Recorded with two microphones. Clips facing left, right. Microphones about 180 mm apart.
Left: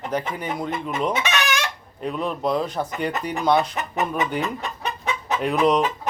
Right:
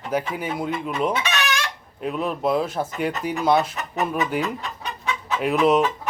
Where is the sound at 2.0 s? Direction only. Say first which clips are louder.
Right 1 dB; 5° right (ahead or behind).